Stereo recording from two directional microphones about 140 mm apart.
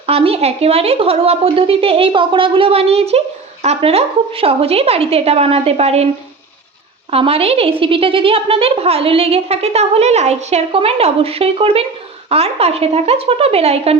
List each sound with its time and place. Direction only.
0.0 s a woman's voice: 45° right (ahead or behind)
7.1 s a woman's voice: 45° right (ahead or behind)